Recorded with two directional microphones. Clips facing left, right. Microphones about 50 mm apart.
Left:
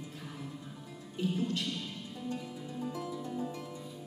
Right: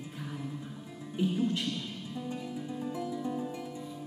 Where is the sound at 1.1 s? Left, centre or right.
Centre.